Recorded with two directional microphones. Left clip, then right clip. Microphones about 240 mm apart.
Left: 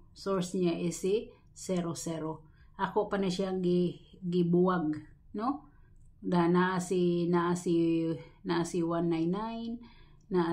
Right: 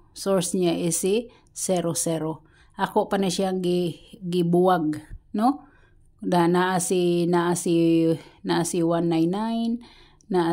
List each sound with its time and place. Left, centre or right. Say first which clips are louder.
0.1 s speech: right 9 dB; right